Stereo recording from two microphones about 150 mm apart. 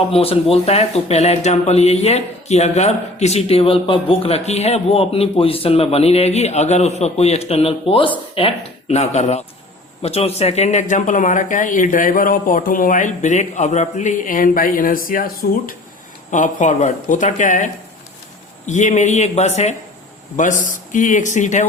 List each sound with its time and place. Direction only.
0.1 s speech: 40° left (ahead or behind); by 15.7 s 70° left (ahead or behind)
16.3 s speech: 55° left (ahead or behind)